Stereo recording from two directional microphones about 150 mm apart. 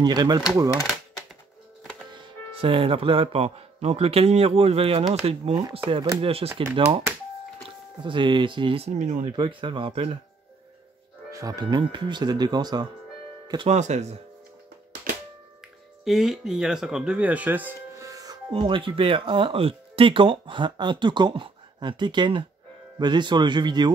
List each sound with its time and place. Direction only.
0.0 s speech: 30° right (ahead or behind)
0.7 s typewriter: 25° left (ahead or behind)
2.6 s speech: 35° right (ahead or behind)
8.0 s speech: 35° right (ahead or behind); by 9.3 s 50° right (ahead or behind)
9.4 s speech: 35° right (ahead or behind)
11.3 s speech: 25° right (ahead or behind)
13.7 s speech: 50° right (ahead or behind)
16.0 s speech: centre (ahead or behind); by 18.4 s 25° right (ahead or behind)
18.5 s speech: 35° right (ahead or behind)